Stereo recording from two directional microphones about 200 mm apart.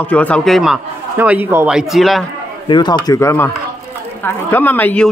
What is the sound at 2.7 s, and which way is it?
Speech, 20° left (ahead or behind).